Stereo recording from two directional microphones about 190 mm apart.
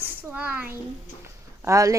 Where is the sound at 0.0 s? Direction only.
10° right (ahead or behind).